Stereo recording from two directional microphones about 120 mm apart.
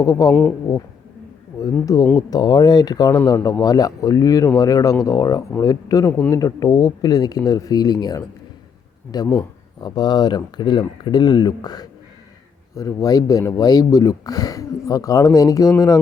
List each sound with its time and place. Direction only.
0.0 s speech: 30° left (ahead or behind)
1.8 s speech: 30° left (ahead or behind)